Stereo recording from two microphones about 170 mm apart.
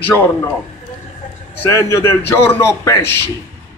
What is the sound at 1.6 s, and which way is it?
A man's voice, 15° left (ahead or behind).